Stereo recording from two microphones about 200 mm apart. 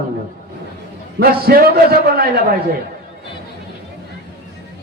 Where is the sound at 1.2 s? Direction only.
50° right (ahead or behind).